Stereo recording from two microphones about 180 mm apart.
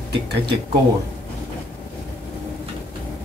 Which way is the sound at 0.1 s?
70° right (ahead or behind).